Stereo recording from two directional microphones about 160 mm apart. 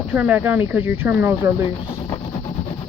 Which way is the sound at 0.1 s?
10° right (ahead or behind).